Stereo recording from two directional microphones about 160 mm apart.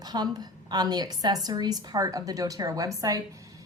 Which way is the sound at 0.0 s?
25° right (ahead or behind).